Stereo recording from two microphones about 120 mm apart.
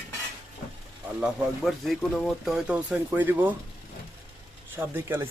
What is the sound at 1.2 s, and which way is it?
Speech, centre (ahead or behind).